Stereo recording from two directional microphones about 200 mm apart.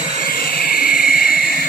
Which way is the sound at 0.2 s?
45° left (ahead or behind).